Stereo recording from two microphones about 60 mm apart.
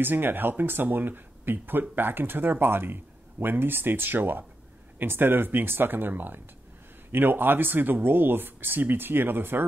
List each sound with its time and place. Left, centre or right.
0.0 s speech: right